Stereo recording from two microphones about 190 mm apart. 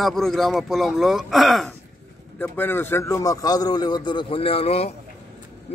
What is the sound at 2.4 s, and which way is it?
A man's voice, 10° left (ahead or behind).